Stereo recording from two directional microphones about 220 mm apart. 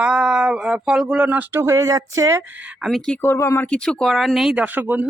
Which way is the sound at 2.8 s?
Centre (ahead or behind).